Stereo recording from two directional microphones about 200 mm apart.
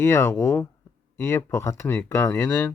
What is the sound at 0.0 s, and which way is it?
Speech, 15° left (ahead or behind).